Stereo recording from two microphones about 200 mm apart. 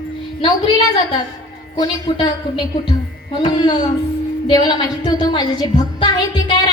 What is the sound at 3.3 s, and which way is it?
A woman's voice, 20° left (ahead or behind).